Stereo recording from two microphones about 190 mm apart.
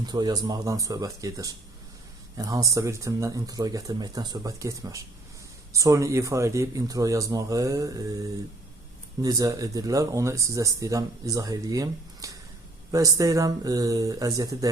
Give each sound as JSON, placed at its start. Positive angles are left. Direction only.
{"t": 0.0, "sound": "speech", "side_deg": -20}